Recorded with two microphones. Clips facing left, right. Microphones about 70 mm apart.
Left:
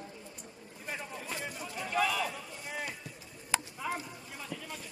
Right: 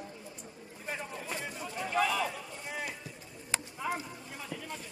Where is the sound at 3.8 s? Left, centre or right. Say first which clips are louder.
Right 1 dB; centre.